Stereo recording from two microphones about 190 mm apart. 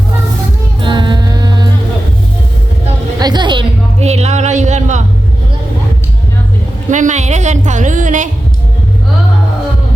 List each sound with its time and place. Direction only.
0.8 s music: 25° right (ahead or behind)
3.2 s a sound: 20° right (ahead or behind); by 5.0 s 40° right (ahead or behind)
6.9 s a woman's voice: 40° right (ahead or behind)